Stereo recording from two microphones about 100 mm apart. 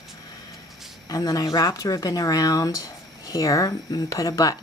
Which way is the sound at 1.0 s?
35° left (ahead or behind).